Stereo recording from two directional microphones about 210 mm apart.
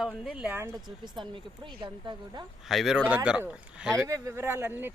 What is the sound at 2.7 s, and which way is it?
Speech, centre (ahead or behind).